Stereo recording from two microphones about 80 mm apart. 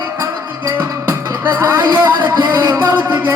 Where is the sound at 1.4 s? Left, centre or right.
Right.